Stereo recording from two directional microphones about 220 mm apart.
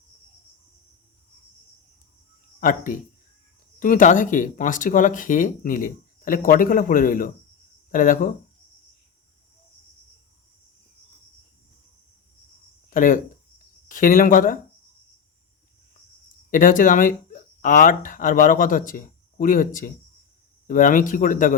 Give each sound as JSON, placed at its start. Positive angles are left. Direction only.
{"t": 2.6, "sound": "speech", "side_deg": 35}
{"t": 12.9, "sound": "speech", "side_deg": 35}
{"t": 16.5, "sound": "speech", "side_deg": 40}